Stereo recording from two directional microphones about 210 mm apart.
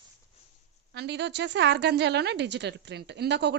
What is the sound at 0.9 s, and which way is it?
A woman's voice, 55° right (ahead or behind).